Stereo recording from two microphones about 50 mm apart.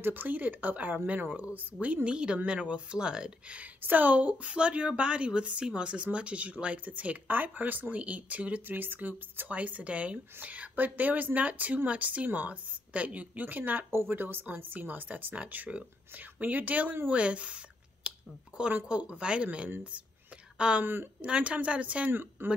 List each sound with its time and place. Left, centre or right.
0.0 s speech: right
2.0 s speech: right
3.8 s speech: right
8.6 s speech: right
18.1 s a sound: right
18.9 s speech: right
20.8 s speech: right
21.2 s speech: right
22.1 s speech: right